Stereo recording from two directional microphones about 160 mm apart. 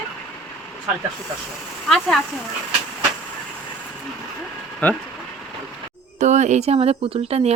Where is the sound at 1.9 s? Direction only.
Centre (ahead or behind).